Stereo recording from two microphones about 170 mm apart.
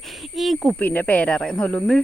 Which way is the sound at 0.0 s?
Centre (ahead or behind).